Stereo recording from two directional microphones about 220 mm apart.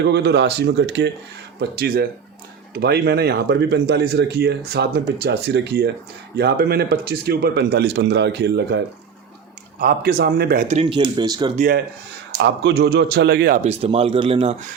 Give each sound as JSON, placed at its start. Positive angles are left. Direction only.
{"t": 0.0, "sound": "speech", "side_deg": -50}
{"t": 11.5, "sound": "speech", "side_deg": -40}
{"t": 13.7, "sound": "speech", "side_deg": -30}